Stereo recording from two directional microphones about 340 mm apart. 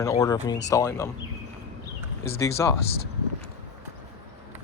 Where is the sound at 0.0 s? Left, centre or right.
Centre.